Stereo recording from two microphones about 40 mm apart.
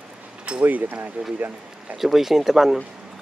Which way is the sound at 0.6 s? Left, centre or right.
Right.